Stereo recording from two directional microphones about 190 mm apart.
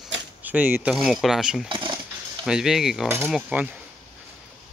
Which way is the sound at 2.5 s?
5° right (ahead or behind).